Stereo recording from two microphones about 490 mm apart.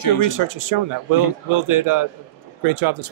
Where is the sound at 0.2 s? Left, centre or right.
Right.